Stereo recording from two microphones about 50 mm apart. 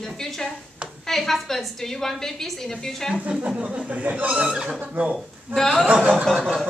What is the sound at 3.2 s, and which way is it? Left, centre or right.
Speech, right.